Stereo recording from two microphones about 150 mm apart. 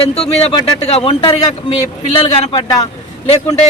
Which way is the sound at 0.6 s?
40° left (ahead or behind).